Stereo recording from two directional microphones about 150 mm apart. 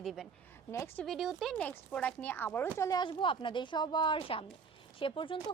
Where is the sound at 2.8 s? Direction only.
25° left (ahead or behind).